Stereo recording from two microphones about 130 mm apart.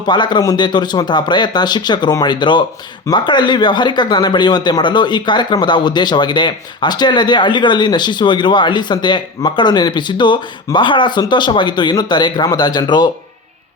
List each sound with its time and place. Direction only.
0.0 s speech: 35° left (ahead or behind)